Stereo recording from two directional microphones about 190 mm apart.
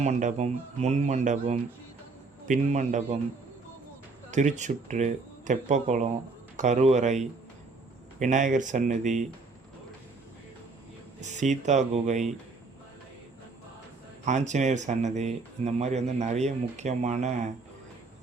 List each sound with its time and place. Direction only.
0.0 s speech: 40° right (ahead or behind)
4.3 s speech: 40° right (ahead or behind)
11.2 s speech: 40° right (ahead or behind)
14.3 s speech: 40° right (ahead or behind)